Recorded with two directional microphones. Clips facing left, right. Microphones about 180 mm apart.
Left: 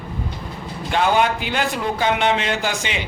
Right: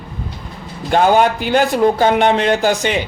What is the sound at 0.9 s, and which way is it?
Speech, 40° right (ahead or behind).